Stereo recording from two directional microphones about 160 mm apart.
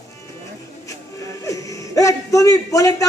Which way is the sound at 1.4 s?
20° left (ahead or behind).